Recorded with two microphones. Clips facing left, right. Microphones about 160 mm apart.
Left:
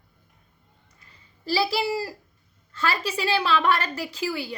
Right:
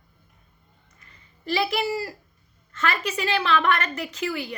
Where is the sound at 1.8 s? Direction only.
10° left (ahead or behind).